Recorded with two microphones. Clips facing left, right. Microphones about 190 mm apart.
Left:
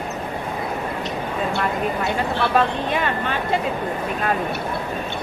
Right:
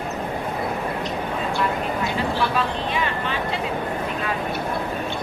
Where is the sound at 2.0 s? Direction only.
60° left (ahead or behind).